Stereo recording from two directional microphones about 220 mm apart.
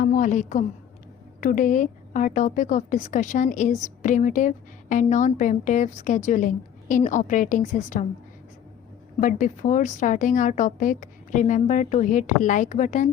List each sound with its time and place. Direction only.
0.0 s a sound: 35° left (ahead or behind)
1.4 s a woman's voice: 35° left (ahead or behind)
9.2 s a woman's voice: 35° left (ahead or behind)